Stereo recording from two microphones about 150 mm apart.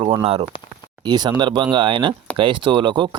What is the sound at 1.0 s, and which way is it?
Speech, 30° right (ahead or behind).